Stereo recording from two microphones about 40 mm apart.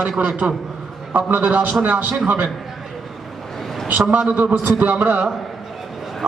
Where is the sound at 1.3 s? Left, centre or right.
Right.